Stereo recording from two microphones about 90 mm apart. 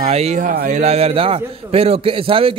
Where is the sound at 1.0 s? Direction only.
90° right.